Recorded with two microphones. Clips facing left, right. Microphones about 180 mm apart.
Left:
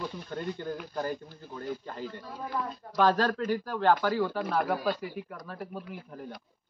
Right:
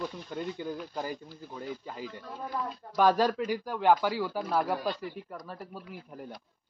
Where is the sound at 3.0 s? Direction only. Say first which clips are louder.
Right 1 dB; 10° right (ahead or behind).